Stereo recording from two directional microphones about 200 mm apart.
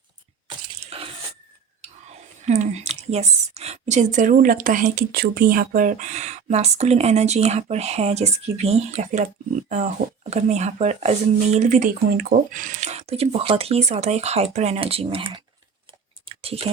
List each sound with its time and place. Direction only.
0.4 s a sound: 30° right (ahead or behind)
2.5 s speech: 35° right (ahead or behind)
16.2 s chewing: 30° right (ahead or behind)